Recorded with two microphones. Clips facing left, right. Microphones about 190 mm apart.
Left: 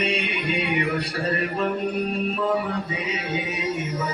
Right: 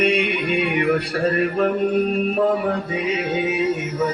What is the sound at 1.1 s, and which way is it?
Mantra, 65° right (ahead or behind).